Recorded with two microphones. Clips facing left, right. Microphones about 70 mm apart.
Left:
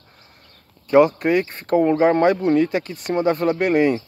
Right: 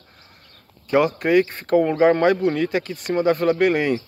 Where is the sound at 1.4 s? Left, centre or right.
Right.